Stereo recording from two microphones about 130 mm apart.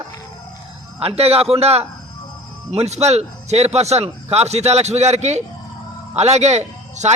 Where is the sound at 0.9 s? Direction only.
50° right (ahead or behind).